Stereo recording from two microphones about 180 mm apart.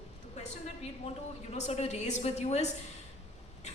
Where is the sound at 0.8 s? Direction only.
35° left (ahead or behind).